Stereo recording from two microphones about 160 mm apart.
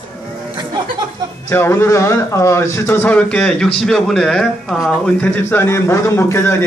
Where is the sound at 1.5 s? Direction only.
15° left (ahead or behind).